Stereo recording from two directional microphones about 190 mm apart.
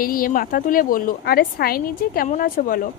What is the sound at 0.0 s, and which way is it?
A woman's voice, 50° left (ahead or behind).